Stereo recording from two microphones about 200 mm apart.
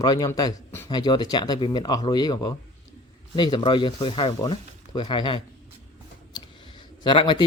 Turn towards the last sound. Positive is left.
turn(degrees=25)  # may be behind; listen again after turning